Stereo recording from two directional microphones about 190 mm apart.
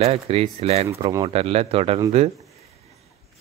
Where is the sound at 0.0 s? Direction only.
30° right (ahead or behind).